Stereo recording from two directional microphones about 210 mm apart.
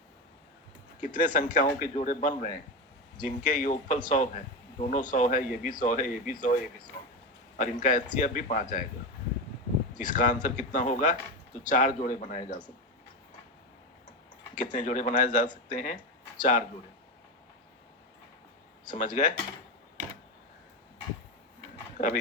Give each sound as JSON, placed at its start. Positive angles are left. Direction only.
{"t": 1.0, "sound": "speech", "side_deg": 40}
{"t": 7.6, "sound": "speech", "side_deg": 40}
{"t": 10.0, "sound": "speech", "side_deg": 40}
{"t": 14.5, "sound": "speech", "side_deg": 35}
{"t": 18.9, "sound": "speech", "side_deg": 40}
{"t": 21.9, "sound": "speech", "side_deg": 35}